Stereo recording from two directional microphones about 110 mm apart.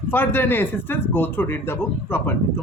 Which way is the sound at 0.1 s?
20° left (ahead or behind).